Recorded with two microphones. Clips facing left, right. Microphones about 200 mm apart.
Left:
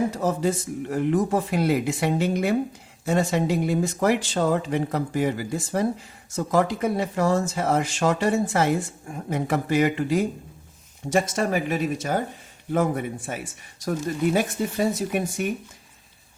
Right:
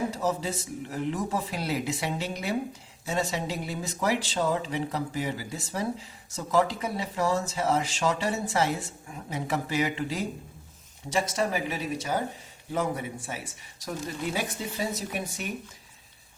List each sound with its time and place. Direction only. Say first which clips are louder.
0.1 s speech: left 5 dB; 55° left (ahead or behind)